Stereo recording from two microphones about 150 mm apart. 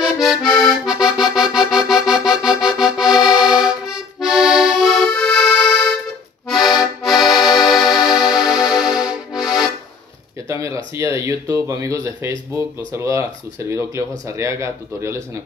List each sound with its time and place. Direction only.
0.0 s accordion: centre (ahead or behind)
10.5 s a sound: 20° right (ahead or behind)
11.0 s speech: 20° right (ahead or behind)